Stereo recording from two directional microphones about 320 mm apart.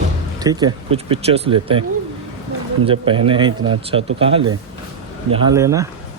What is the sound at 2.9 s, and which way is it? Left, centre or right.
Speech, centre.